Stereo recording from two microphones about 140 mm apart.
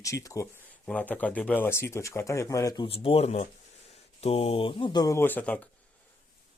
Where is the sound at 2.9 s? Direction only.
45° left (ahead or behind).